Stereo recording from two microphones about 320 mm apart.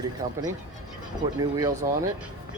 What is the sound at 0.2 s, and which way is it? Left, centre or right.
Speech, right.